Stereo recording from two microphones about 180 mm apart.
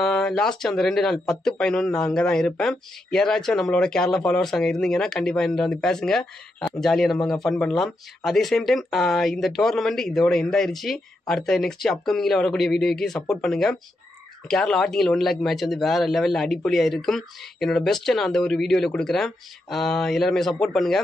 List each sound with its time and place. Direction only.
0.0 s speech: 5° left (ahead or behind)